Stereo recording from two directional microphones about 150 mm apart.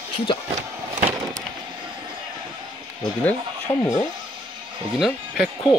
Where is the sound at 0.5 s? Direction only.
50° right (ahead or behind).